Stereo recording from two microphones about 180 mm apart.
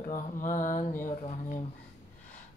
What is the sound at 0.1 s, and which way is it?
Music, 45° left (ahead or behind).